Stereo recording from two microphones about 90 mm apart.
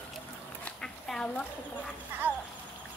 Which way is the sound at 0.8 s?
5° left (ahead or behind).